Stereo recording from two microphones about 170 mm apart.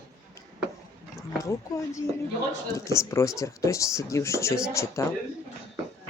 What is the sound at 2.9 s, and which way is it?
Speech, 15° left (ahead or behind).